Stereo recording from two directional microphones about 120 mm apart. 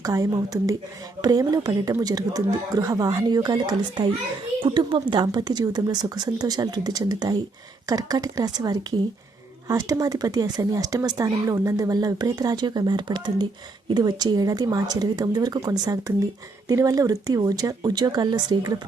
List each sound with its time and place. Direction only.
0.0 s speech: 30° right (ahead or behind)